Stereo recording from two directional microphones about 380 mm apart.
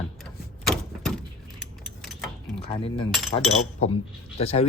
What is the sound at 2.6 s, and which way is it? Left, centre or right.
Speech, centre.